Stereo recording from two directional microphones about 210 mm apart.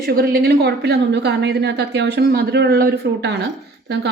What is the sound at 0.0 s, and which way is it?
A woman's voice, 45° right (ahead or behind).